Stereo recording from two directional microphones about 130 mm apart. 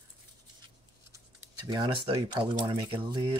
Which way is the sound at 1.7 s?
35° right (ahead or behind).